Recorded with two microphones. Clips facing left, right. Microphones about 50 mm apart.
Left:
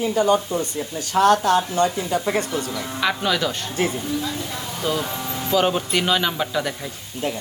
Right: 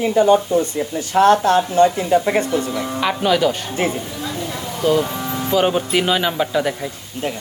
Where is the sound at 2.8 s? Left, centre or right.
Centre.